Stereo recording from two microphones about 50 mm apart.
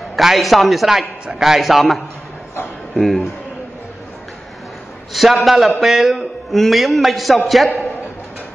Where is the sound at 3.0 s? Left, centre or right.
Centre.